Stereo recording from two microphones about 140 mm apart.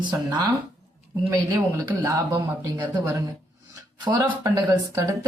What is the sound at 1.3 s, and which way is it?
Speech, 25° right (ahead or behind).